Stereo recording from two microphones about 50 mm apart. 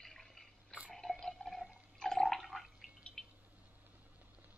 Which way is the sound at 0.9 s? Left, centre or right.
Centre.